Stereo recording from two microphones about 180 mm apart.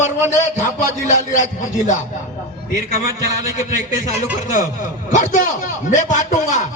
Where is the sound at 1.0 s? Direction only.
45° left (ahead or behind).